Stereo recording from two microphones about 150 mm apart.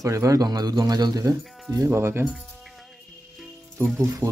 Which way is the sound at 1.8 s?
15° right (ahead or behind).